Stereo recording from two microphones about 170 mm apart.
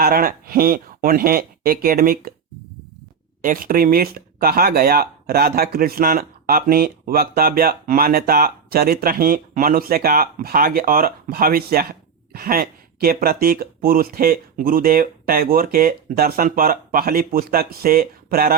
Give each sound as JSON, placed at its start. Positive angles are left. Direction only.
{"t": 0.0, "sound": "speech", "side_deg": -60}
{"t": 3.4, "sound": "speech", "side_deg": -55}